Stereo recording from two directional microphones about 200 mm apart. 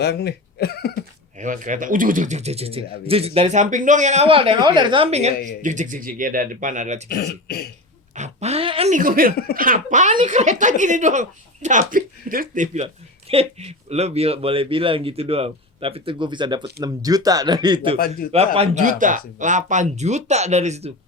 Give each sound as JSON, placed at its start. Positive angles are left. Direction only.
{"t": 0.0, "sound": "speech", "side_deg": 55}
{"t": 1.4, "sound": "speech", "side_deg": -40}
{"t": 7.1, "sound": "speech", "side_deg": 50}
{"t": 8.1, "sound": "speech", "side_deg": -35}
{"t": 17.9, "sound": "speech", "side_deg": 50}
{"t": 18.3, "sound": "speech", "side_deg": -30}